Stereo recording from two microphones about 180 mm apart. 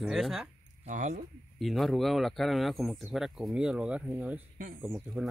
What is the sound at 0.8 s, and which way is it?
Speech, 40° right (ahead or behind).